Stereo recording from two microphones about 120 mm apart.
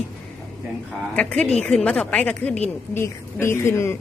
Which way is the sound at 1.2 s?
10° left (ahead or behind).